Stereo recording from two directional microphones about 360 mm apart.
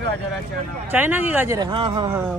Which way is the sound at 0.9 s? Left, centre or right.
Centre.